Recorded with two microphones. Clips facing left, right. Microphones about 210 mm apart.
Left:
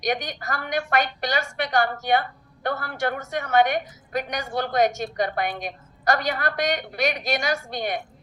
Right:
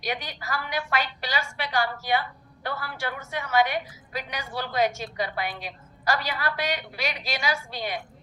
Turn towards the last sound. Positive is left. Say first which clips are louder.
# left 4 dB
turn(degrees=55)  # may be behind; listen again after turning